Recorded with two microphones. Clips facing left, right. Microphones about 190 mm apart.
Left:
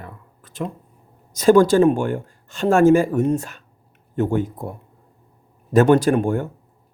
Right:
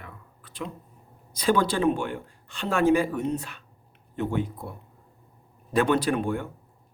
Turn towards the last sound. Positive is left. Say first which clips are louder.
# left 7 dB
turn(degrees=45)  # may be behind; listen again after turning